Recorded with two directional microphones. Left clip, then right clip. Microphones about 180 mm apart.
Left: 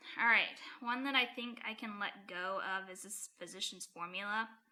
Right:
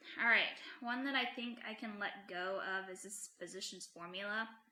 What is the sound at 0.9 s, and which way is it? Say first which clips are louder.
A woman's voice: left 4 dB; 30° left (ahead or behind).